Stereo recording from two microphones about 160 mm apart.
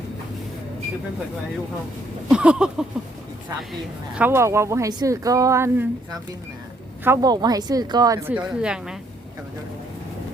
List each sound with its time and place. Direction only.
2.3 s speech: 5° right (ahead or behind)
4.1 s speech: 10° right (ahead or behind)
7.0 s speech: 20° right (ahead or behind)
8.3 s speech: 5° right (ahead or behind)